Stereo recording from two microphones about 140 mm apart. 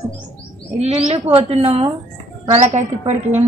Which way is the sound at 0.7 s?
50° right (ahead or behind).